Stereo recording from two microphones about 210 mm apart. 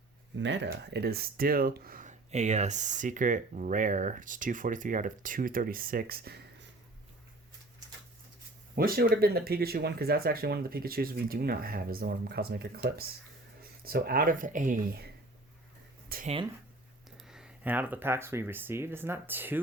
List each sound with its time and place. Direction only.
0.3 s speech: 55° right (ahead or behind)
8.7 s speech: 45° right (ahead or behind)
16.0 s a sound: 45° right (ahead or behind)
17.2 s speech: 5° right (ahead or behind)